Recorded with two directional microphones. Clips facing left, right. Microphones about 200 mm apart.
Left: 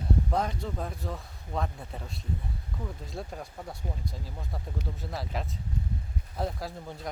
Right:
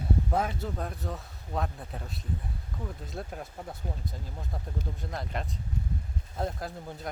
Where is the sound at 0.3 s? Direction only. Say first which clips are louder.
Even; 5° right (ahead or behind).